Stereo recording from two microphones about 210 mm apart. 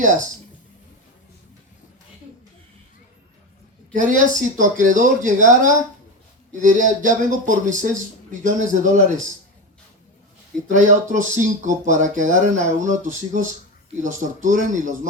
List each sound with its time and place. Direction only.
0.0 s speech: 35° right (ahead or behind)
3.9 s speech: 40° right (ahead or behind)
10.7 s speech: 35° right (ahead or behind)